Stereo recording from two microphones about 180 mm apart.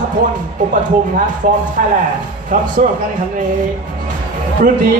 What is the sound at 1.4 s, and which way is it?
Speech, 50° right (ahead or behind).